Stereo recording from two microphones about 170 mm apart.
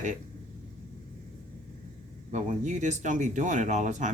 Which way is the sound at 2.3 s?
45° right (ahead or behind).